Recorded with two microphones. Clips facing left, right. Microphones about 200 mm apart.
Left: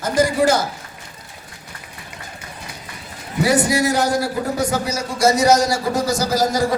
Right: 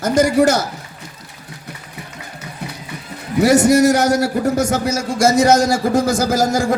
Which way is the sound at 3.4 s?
45° right (ahead or behind).